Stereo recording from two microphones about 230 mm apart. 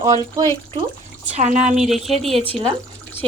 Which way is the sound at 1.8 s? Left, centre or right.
Centre.